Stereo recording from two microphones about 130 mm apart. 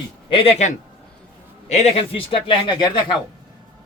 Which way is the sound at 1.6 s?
60° left (ahead or behind).